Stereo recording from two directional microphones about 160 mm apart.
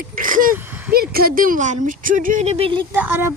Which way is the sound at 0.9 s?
70° right (ahead or behind).